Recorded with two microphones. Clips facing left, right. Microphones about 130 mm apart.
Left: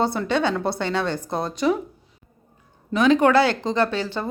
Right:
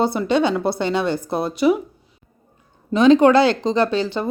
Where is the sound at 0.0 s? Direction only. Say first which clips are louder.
Right 4 dB; 15° right (ahead or behind).